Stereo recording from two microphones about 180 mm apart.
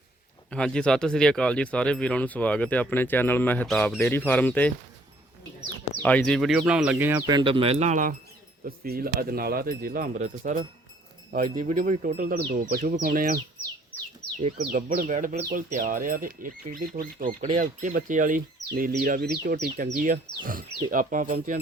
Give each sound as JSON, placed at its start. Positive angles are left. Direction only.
{"t": 0.5, "sound": "speech", "side_deg": 5}
{"t": 6.0, "sound": "speech", "side_deg": 10}
{"t": 7.3, "sound": "speech", "side_deg": -25}
{"t": 8.6, "sound": "speech", "side_deg": -55}
{"t": 14.4, "sound": "speech", "side_deg": -40}
{"t": 17.2, "sound": "speech", "side_deg": -30}
{"t": 17.6, "sound": "speech", "side_deg": -45}